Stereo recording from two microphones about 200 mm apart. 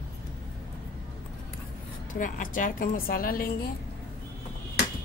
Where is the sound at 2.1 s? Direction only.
40° left (ahead or behind).